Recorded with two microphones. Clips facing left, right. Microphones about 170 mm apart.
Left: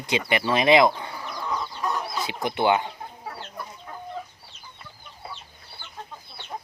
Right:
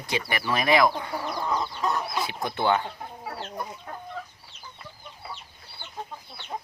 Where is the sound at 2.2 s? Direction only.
15° left (ahead or behind).